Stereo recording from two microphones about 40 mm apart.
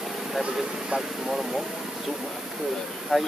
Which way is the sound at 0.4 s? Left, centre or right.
Centre.